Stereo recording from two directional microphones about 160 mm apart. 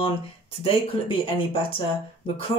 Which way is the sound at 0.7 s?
35° left (ahead or behind).